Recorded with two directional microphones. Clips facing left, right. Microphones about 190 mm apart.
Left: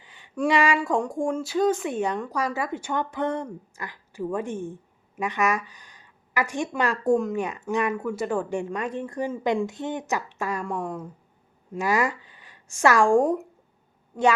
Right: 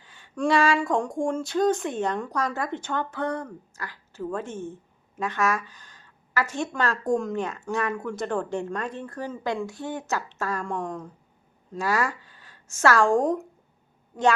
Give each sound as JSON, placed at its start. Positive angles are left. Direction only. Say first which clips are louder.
{"t": 0.0, "sound": "a sound", "louder": "left 1 dB", "side_deg": 15}
{"t": 0.3, "sound": "a woman's voice", "louder": "even", "side_deg": 15}
{"t": 0.8, "sound": "a woman's voice", "louder": "even", "side_deg": 5}
{"t": 11.7, "sound": "a woman's voice", "louder": "left 2 dB", "side_deg": 15}